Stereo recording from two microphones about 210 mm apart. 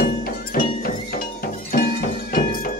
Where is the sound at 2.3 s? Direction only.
45° left (ahead or behind).